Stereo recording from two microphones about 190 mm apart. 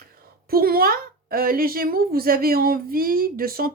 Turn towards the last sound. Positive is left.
turn(degrees=-50)  # may be behind; listen again after turning